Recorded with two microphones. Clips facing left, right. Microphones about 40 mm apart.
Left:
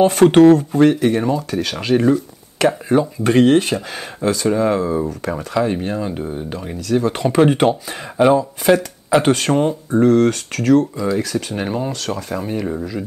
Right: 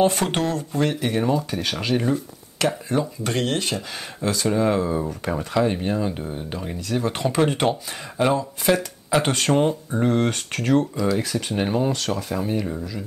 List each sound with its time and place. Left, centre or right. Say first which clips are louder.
0.0 s speech: left 11 dB; centre
7.2 s speech: left 7 dB; centre
10.0 s speech: left 7 dB; centre
11.6 s speech: even; centre
12.1 s speech: left 2 dB; centre
12.6 s speech: left 6 dB; centre